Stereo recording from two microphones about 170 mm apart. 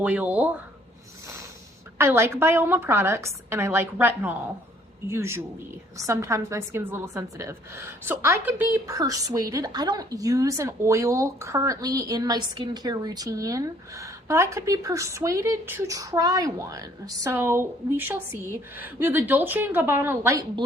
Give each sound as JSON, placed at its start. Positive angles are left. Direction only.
{"t": 0.0, "sound": "a woman's voice", "side_deg": -10}
{"t": 2.0, "sound": "a woman's voice", "side_deg": -15}